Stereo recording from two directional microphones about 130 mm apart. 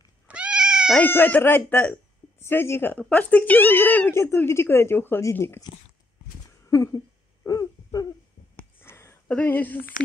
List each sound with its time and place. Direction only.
0.3 s cat: 10° right (ahead or behind)
0.9 s speech: 15° left (ahead or behind)
6.7 s a sound: 25° left (ahead or behind)
7.4 s hoot: 30° left (ahead or behind)
8.7 s a sound: 20° left (ahead or behind)
9.3 s speech: 10° left (ahead or behind)